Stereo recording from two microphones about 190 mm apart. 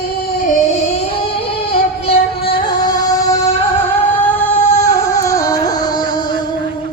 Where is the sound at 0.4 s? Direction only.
35° left (ahead or behind).